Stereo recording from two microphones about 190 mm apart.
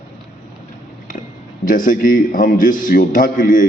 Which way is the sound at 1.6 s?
45° left (ahead or behind).